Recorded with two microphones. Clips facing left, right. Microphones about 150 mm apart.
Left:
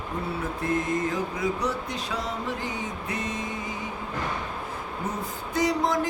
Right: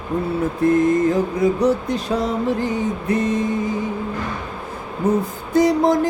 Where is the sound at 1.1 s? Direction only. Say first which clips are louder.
Right 10 dB; 50° right (ahead or behind).